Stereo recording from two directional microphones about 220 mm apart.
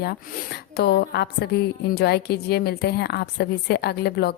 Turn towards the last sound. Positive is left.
turn(degrees=45)  # may be behind; listen again after turning